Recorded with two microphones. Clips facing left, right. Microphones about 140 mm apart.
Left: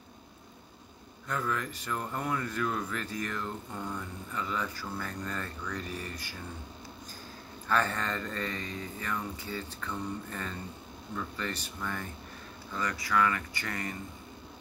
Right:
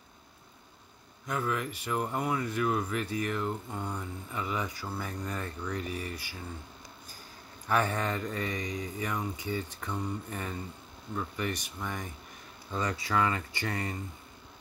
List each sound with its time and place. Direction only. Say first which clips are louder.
1.2 s speech: right 1 dB; 10° right (ahead or behind)
7.6 s speech: right 1 dB; 10° right (ahead or behind)